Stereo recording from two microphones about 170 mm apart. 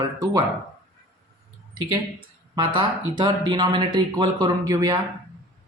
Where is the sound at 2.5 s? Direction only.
25° right (ahead or behind).